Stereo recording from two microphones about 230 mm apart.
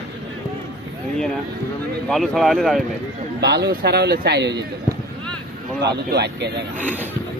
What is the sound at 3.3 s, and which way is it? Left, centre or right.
Speech, right.